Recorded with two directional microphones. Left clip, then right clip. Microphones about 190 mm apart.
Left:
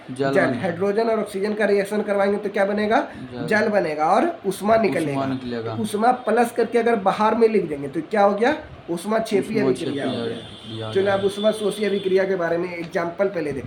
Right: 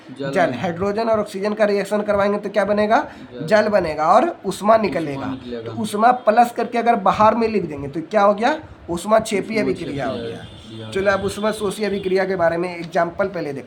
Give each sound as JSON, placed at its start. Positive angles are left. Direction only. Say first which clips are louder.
{"t": 0.3, "sound": "speech", "louder": "right 3 dB", "side_deg": -20}
{"t": 10.9, "sound": "speech", "louder": "right 1 dB", "side_deg": -30}